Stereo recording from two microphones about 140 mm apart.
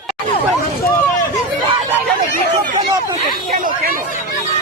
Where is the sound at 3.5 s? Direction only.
80° right.